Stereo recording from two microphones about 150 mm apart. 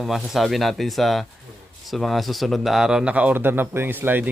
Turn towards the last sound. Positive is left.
turn(degrees=-15)  # may be behind; listen again after turning